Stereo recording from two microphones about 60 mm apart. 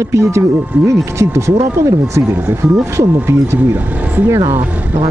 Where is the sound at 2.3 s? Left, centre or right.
Right.